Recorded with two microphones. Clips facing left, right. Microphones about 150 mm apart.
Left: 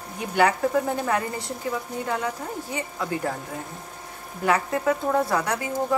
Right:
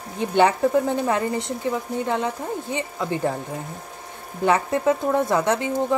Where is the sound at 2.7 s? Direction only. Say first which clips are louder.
Right 1 dB; 25° right (ahead or behind).